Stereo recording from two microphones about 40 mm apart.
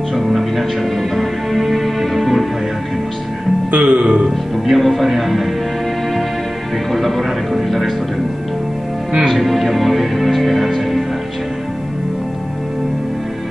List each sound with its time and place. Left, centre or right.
0.1 s music: centre
3.7 s music: right
4.0 s music: right
4.6 s speech: centre
6.9 s speech: centre
9.3 s speech: centre